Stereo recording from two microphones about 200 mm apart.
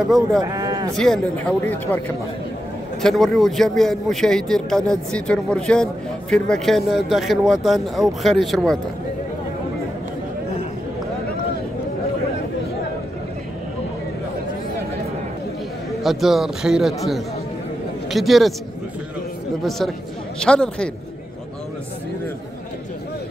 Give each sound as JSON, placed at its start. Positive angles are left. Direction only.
{"t": 0.0, "sound": "a man's voice", "side_deg": 0}
{"t": 0.4, "sound": "sheep", "side_deg": -15}
{"t": 0.9, "sound": "speech", "side_deg": 0}
{"t": 3.0, "sound": "a man's voice", "side_deg": 0}
{"t": 16.0, "sound": "a man's voice", "side_deg": 0}
{"t": 20.4, "sound": "a man's voice", "side_deg": 5}